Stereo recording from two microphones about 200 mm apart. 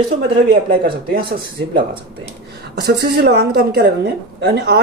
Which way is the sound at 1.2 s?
25° right (ahead or behind).